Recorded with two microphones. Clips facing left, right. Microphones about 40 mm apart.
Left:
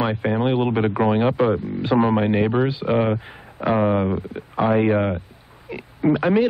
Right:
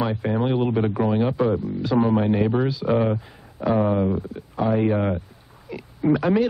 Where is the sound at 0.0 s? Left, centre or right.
Left.